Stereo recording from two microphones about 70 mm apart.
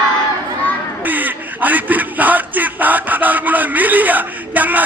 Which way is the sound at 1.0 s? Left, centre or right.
Right.